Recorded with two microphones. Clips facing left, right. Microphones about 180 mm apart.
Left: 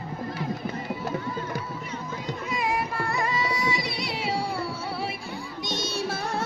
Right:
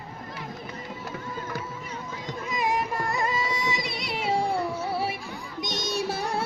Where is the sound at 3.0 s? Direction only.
20° right (ahead or behind).